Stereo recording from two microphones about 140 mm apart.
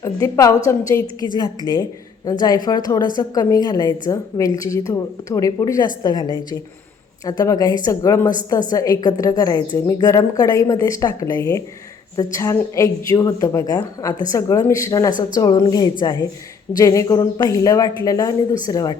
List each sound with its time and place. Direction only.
0.0 s a woman's voice: 25° left (ahead or behind)
1.0 s a woman's voice: 30° right (ahead or behind)
1.7 s a woman's voice: 25° left (ahead or behind)